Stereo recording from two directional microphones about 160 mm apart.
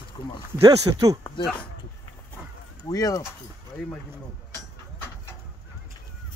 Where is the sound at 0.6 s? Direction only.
25° right (ahead or behind).